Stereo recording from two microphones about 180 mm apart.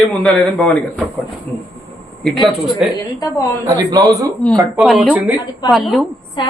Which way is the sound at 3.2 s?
20° left (ahead or behind).